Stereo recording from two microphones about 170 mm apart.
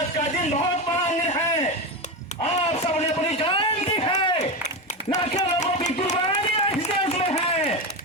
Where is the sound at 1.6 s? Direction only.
40° left (ahead or behind).